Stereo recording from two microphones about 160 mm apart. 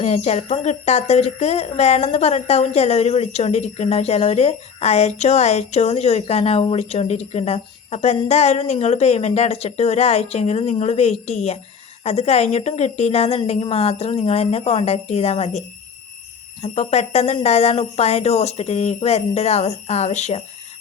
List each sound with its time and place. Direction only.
0.0 s speech: 45° left (ahead or behind)